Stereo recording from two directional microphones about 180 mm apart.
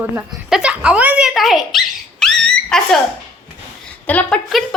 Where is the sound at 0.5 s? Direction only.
5° right (ahead or behind).